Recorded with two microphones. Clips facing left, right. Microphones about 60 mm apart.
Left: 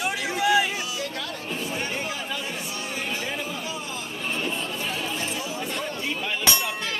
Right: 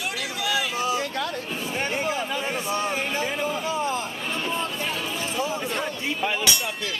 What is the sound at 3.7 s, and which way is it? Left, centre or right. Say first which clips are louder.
Vehicle: right 8 dB; right.